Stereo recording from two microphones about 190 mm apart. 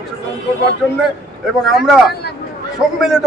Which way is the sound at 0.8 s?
Centre (ahead or behind).